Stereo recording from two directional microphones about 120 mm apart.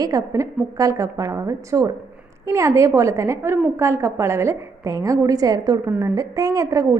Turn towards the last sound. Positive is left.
turn(degrees=-25)  # may be behind; listen again after turning